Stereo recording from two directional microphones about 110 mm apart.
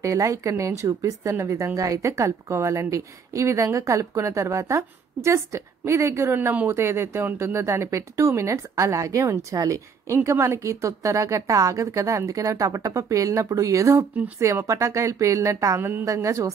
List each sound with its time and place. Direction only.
0.0 s speech: 30° right (ahead or behind)